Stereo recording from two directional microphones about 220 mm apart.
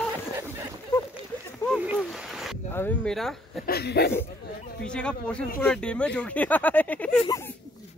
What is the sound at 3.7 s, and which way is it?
Speech, 45° left (ahead or behind).